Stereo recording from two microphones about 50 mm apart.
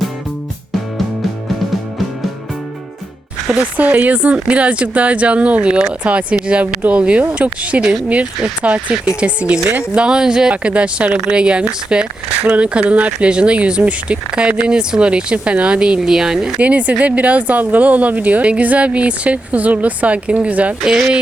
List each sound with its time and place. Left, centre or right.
3.8 s speech: right; by 10.5 s centre
10.5 s speech: right
16.6 s speech: right